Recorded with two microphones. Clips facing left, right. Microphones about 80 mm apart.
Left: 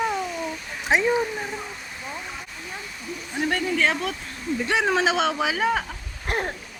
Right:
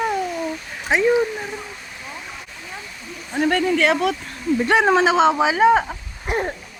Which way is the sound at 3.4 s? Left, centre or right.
Right.